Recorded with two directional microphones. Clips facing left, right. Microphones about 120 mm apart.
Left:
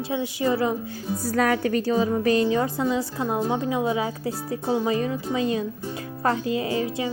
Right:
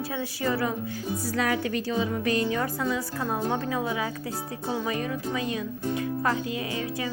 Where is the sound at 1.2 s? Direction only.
45° left (ahead or behind).